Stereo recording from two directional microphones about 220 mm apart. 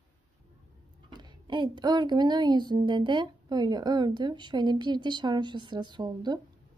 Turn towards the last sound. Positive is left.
turn(degrees=-20)  # may be behind; listen again after turning